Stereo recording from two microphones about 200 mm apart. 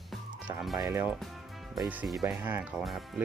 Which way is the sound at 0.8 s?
15° right (ahead or behind).